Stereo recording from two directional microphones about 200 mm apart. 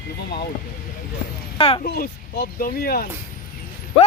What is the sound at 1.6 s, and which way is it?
Speech, 25° left (ahead or behind).